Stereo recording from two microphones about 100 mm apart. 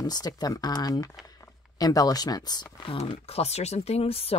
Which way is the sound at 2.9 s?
70° left (ahead or behind).